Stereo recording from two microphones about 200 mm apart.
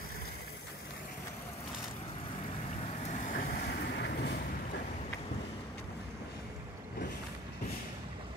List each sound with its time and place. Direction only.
3.1 s vehicle: 40° left (ahead or behind); by 4.4 s 55° left (ahead or behind)